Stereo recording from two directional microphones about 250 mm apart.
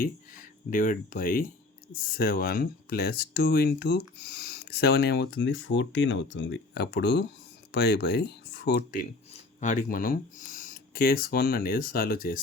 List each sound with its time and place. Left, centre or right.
0.0 s speech: left